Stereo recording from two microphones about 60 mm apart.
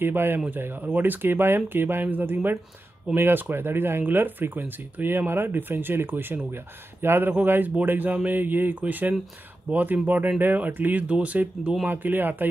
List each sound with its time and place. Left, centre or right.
0.0 s speech: right
11.9 s speech: right